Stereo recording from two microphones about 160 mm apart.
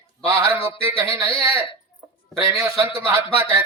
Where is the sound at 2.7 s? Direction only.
15° right (ahead or behind).